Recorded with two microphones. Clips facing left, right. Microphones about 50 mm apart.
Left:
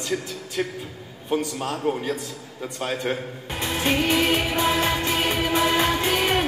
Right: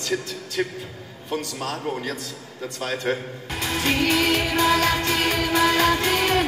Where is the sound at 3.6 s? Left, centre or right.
Left.